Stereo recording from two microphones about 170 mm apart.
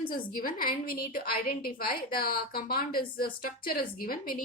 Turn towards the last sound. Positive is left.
turn(degrees=60)  # may be behind; listen again after turning